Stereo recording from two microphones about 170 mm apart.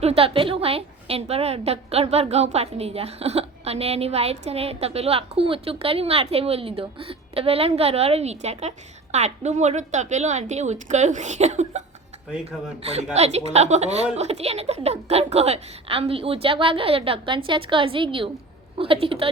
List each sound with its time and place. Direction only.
0.0 s a woman's voice: 35° right (ahead or behind)
13.1 s a woman's voice: 40° right (ahead or behind)